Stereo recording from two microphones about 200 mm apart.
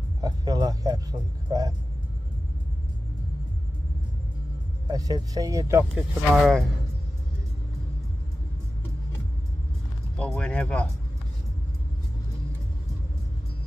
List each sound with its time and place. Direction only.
0.2 s speech: 20° right (ahead or behind)
4.8 s speech: 20° right (ahead or behind)
5.9 s speech: centre (ahead or behind)
10.1 s speech: 5° left (ahead or behind)